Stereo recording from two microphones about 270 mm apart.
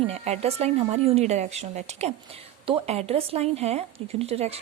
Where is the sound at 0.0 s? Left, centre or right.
Right.